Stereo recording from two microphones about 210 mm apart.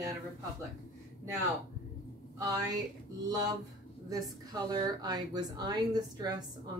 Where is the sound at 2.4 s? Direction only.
15° right (ahead or behind).